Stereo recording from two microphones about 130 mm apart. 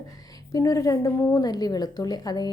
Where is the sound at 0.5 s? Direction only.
25° left (ahead or behind).